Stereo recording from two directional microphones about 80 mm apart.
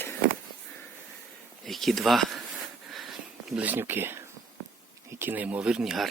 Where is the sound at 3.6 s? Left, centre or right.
Right.